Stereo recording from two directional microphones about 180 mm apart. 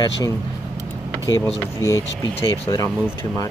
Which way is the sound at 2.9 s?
5° right (ahead or behind).